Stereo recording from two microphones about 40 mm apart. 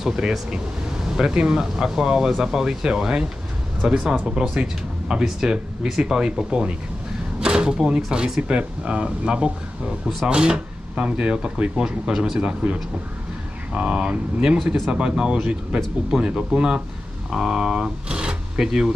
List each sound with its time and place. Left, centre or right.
0.0 s speech: centre; by 11.7 s right
11.7 s speech: centre
12.4 s speech: right
13.7 s speech: right
17.3 s speech: centre